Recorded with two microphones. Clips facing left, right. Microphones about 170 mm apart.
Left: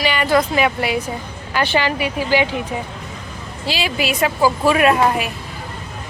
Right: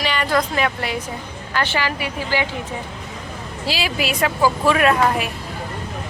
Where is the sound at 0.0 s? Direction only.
5° left (ahead or behind).